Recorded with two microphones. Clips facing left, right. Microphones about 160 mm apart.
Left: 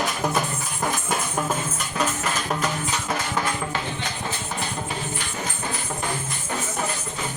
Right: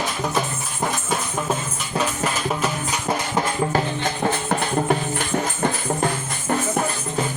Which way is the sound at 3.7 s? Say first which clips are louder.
Right 7 dB; 50° right (ahead or behind).